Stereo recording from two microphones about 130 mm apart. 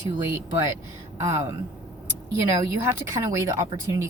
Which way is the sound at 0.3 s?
20° right (ahead or behind).